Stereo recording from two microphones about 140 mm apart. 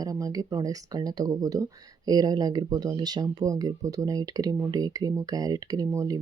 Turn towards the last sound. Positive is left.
turn(degrees=-25)  # may be behind; listen again after turning